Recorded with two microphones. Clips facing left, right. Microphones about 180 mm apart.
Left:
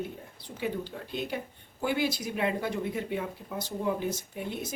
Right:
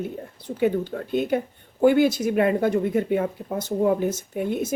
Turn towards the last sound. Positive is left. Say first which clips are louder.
# right 10 dB
turn(degrees=-55)  # may be behind; listen again after turning